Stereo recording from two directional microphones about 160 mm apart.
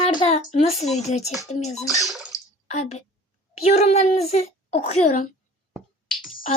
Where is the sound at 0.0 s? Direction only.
40° left (ahead or behind).